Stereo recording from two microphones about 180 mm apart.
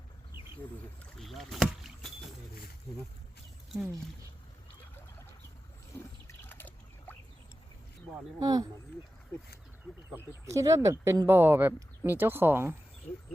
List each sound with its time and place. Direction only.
1.2 s rowboat: centre (ahead or behind)
6.2 s trickle: 10° left (ahead or behind)
8.4 s speech: 20° right (ahead or behind)
10.1 s speech: 15° right (ahead or behind)